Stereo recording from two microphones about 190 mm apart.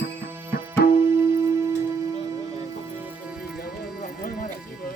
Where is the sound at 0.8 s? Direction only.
55° left (ahead or behind).